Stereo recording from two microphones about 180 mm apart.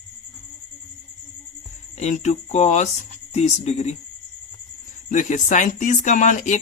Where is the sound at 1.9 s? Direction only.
40° left (ahead or behind).